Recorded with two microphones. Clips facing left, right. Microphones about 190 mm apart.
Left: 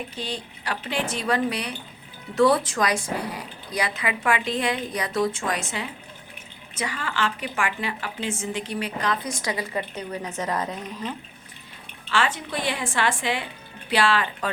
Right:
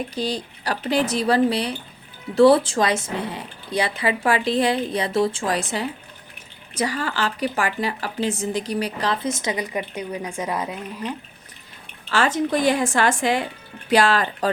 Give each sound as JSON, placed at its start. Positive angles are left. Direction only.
{"t": 0.1, "sound": "a woman's voice", "side_deg": -35}
{"t": 12.0, "sound": "a woman's voice", "side_deg": -40}